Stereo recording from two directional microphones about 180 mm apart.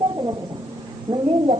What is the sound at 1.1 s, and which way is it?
Speech, 25° right (ahead or behind).